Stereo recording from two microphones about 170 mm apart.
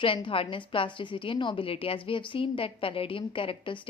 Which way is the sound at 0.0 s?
30° left (ahead or behind).